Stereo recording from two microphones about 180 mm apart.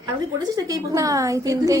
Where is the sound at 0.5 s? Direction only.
20° right (ahead or behind).